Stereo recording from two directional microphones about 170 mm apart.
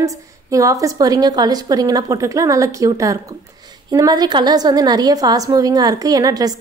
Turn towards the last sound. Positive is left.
turn(degrees=-20)  # may be behind; listen again after turning